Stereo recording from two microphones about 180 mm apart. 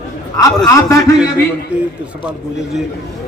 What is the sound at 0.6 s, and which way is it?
Speech, 20° left (ahead or behind).